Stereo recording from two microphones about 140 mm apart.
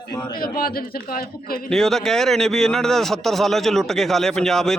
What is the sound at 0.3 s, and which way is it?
A man's voice, 90° left.